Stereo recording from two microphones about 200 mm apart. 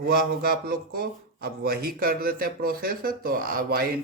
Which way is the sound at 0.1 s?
50° right (ahead or behind).